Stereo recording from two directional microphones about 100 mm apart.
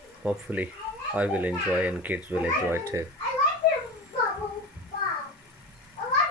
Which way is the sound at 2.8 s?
30° right (ahead or behind).